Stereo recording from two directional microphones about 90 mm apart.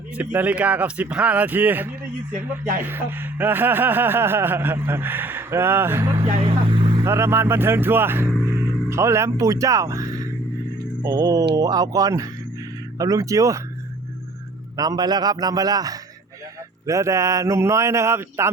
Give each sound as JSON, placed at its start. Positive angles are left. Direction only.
{"t": 0.2, "sound": "a man's voice", "side_deg": -20}
{"t": 6.4, "sound": "speech", "side_deg": -70}
{"t": 7.0, "sound": "speech", "side_deg": -30}
{"t": 14.8, "sound": "speech", "side_deg": -45}